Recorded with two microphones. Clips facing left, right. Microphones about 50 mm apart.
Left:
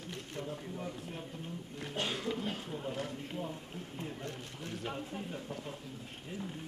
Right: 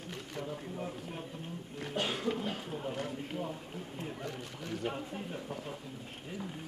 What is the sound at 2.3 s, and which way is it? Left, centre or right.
Speech, centre.